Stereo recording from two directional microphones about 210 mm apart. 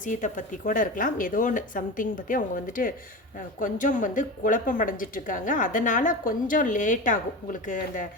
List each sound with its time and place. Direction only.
0.0 s a woman's voice: 35° left (ahead or behind)